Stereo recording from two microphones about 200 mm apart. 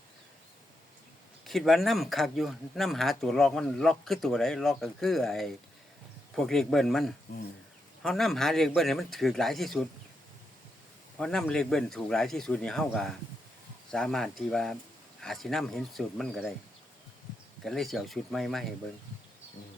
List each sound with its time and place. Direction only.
1.5 s speech: centre (ahead or behind)
7.3 s speech: 50° left (ahead or behind)
8.0 s speech: centre (ahead or behind)
11.2 s speech: 5° left (ahead or behind)
17.7 s speech: centre (ahead or behind)